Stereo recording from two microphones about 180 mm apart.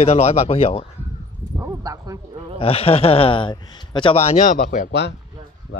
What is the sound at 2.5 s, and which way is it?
Speech, 30° left (ahead or behind).